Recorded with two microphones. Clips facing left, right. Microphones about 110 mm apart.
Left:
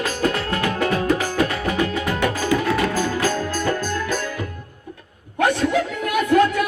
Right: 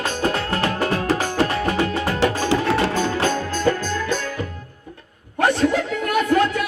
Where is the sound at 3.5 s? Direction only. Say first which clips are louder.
Right 2 dB; 5° left (ahead or behind).